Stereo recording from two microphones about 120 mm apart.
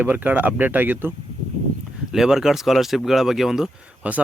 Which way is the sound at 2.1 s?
5° right (ahead or behind).